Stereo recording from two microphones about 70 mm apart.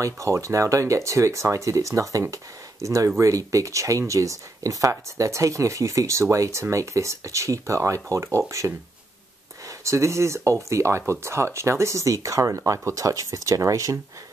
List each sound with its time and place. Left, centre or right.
0.0 s speech: right